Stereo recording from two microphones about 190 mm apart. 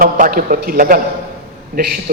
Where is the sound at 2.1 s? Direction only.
50° right (ahead or behind).